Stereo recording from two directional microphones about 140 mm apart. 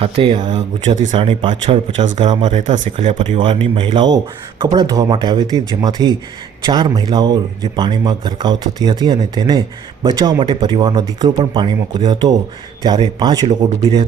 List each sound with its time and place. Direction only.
0.0 s speech: 40° right (ahead or behind)
0.9 s speech: 50° right (ahead or behind); by 2.5 s 35° right (ahead or behind)
2.5 s speech: 60° right (ahead or behind)
3.4 s speech: 40° right (ahead or behind)